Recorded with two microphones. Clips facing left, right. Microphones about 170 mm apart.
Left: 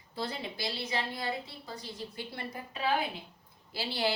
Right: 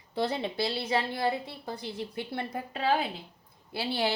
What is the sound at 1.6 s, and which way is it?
Speech, 60° right (ahead or behind).